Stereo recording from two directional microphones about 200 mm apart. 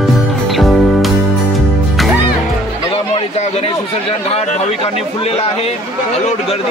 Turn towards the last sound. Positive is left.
turn(degrees=30)  # may be behind; listen again after turning